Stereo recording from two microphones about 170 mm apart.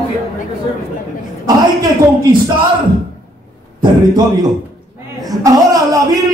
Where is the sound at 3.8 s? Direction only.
25° right (ahead or behind).